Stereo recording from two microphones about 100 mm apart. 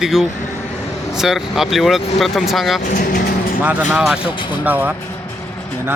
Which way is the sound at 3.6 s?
15° right (ahead or behind).